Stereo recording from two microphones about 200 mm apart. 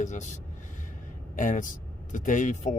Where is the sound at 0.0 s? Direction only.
35° left (ahead or behind).